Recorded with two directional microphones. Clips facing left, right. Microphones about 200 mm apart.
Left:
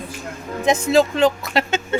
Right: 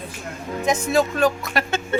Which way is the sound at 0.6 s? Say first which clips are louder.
Left 4 dB; 25° left (ahead or behind).